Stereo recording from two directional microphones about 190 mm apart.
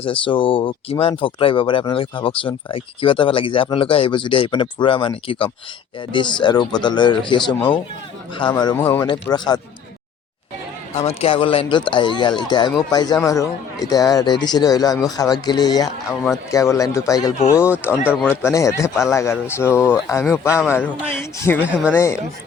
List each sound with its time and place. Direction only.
0.0 s speech: 25° left (ahead or behind)
10.9 s speech: 30° left (ahead or behind); by 21.7 s 10° left (ahead or behind)
21.7 s speech: 5° right (ahead or behind)
21.9 s speech: 15° left (ahead or behind)